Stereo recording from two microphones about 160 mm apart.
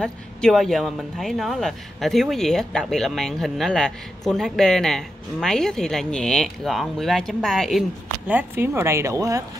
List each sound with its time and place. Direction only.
0.0 s speech: 5° left (ahead or behind)
8.3 s speech: 10° right (ahead or behind)